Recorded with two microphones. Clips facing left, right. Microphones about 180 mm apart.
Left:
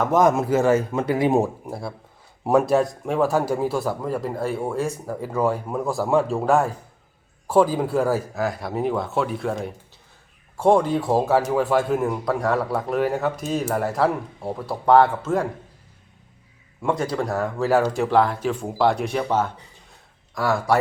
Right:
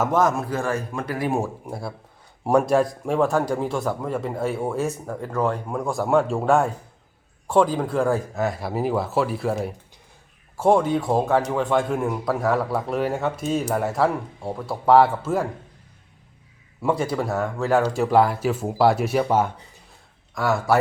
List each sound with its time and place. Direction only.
0.1 s speech: 15° left (ahead or behind)
1.6 s a man's voice: centre (ahead or behind)
16.8 s a man's voice: 5° right (ahead or behind)